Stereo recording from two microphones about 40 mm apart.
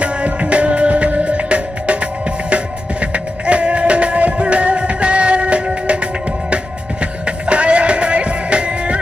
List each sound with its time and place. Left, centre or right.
0.0 s music: right